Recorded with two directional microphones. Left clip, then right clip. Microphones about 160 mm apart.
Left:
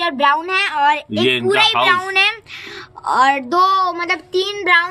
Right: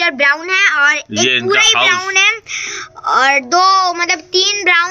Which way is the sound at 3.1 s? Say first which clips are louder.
Right 3 dB; 40° left (ahead or behind).